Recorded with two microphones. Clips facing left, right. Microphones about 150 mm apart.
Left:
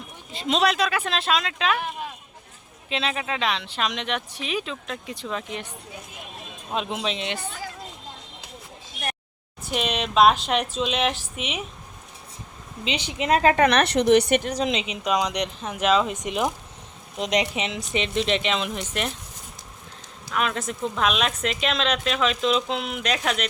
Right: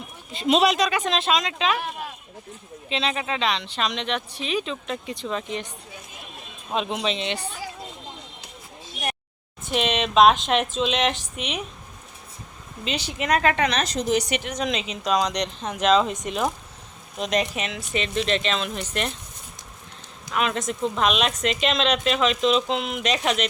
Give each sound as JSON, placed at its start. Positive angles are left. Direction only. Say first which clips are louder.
{"t": 0.3, "sound": "a woman's voice", "louder": "right 3 dB", "side_deg": -10}
{"t": 2.9, "sound": "speech", "louder": "right 1 dB", "side_deg": 5}
{"t": 6.7, "sound": "speech", "louder": "right 2 dB", "side_deg": 5}
{"t": 9.6, "sound": "a woman's voice", "louder": "right 2 dB", "side_deg": 5}
{"t": 12.9, "sound": "a woman's voice", "louder": "left 1 dB", "side_deg": 20}
{"t": 13.6, "sound": "a woman's voice", "louder": "left 5 dB", "side_deg": 60}
{"t": 14.5, "sound": "speech", "louder": "left 2 dB", "side_deg": 25}
{"t": 20.3, "sound": "a woman's voice", "louder": "right 1 dB", "side_deg": 0}